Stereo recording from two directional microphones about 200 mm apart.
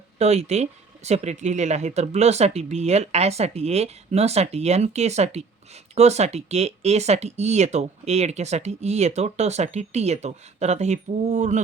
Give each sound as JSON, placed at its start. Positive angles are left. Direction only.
{"t": 0.2, "sound": "speech", "side_deg": -35}